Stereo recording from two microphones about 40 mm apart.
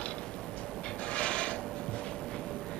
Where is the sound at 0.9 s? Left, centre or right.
Left.